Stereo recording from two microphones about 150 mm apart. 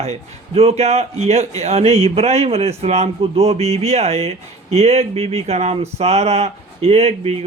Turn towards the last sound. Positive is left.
turn(degrees=-45)  # may be behind; listen again after turning